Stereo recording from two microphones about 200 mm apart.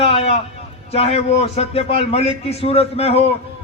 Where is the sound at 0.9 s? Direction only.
30° left (ahead or behind).